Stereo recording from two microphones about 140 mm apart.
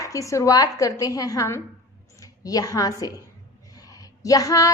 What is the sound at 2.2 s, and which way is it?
Speech, 25° left (ahead or behind).